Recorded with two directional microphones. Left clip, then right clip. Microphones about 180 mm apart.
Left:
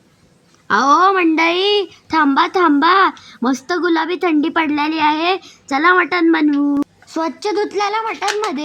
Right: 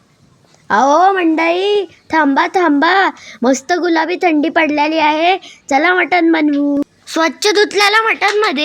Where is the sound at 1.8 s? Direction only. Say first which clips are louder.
Right 2 dB; centre (ahead or behind).